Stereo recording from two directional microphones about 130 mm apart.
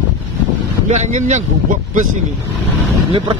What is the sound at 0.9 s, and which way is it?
Speech, 65° right (ahead or behind).